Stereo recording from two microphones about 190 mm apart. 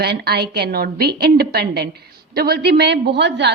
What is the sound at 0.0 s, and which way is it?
A woman's voice, 55° right (ahead or behind).